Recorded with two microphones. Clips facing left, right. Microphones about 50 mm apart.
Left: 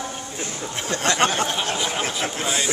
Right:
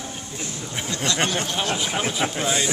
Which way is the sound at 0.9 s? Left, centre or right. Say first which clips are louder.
Left 4 dB; left.